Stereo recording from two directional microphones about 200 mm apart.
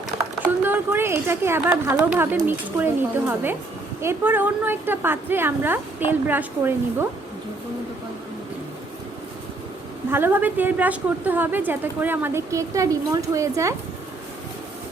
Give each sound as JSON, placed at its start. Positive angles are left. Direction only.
{"t": 0.6, "sound": "a woman's voice", "side_deg": -10}
{"t": 10.1, "sound": "a woman's voice", "side_deg": -10}